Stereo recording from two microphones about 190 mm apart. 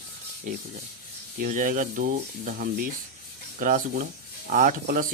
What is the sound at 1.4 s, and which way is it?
Speech, 45° right (ahead or behind).